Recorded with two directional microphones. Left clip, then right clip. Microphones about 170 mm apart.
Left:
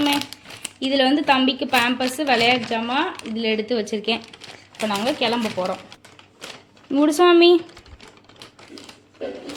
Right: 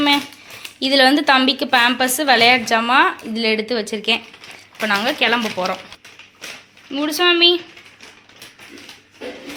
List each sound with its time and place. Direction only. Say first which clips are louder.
0.8 s a woman's voice: right 5 dB; centre (ahead or behind)
3.7 s speech: right 3 dB; 20° left (ahead or behind)
4.8 s a woman's voice: right 4 dB; 5° left (ahead or behind)
5.5 s speech: right 3 dB; 5° right (ahead or behind)
6.9 s speech: left 1 dB; 55° left (ahead or behind)